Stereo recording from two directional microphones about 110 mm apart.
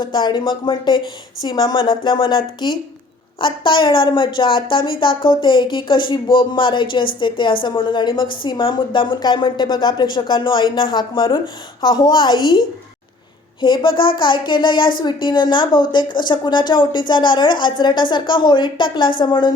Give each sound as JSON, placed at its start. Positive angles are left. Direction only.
{"t": 0.0, "sound": "a woman's voice", "side_deg": 40}